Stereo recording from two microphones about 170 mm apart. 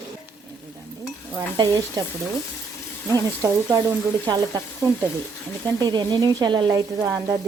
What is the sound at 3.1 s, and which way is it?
Speech, 20° right (ahead or behind).